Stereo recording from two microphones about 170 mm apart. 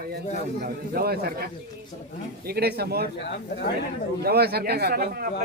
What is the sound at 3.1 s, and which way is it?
Speech, 80° left.